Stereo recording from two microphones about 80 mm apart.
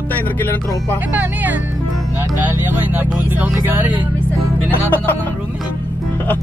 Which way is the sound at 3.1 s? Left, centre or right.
Centre.